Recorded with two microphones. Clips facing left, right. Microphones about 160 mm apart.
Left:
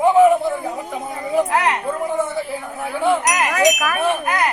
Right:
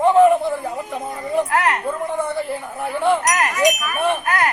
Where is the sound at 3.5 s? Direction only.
90° left.